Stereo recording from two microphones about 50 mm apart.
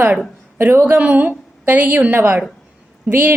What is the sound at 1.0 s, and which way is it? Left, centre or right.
A woman's voice, right.